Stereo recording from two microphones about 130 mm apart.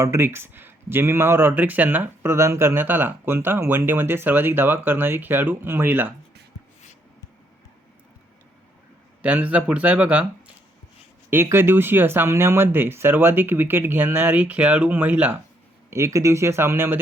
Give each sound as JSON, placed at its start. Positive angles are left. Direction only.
{"t": 0.0, "sound": "speech", "side_deg": -20}
{"t": 9.2, "sound": "speech", "side_deg": -10}
{"t": 11.3, "sound": "speech", "side_deg": -20}
{"t": 15.9, "sound": "speech", "side_deg": -25}